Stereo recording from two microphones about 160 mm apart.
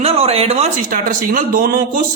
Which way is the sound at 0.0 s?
40° right (ahead or behind).